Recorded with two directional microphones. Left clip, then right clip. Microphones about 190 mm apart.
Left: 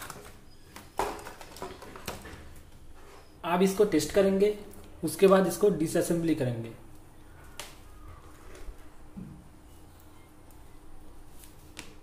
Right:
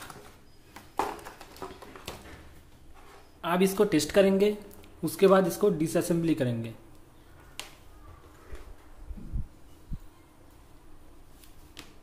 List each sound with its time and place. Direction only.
1.6 s a sound: 10° right (ahead or behind)
3.3 s speech: 25° right (ahead or behind)
5.0 s speech: 15° right (ahead or behind)